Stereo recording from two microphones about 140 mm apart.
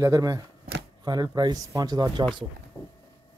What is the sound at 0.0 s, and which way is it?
Speech, 25° right (ahead or behind).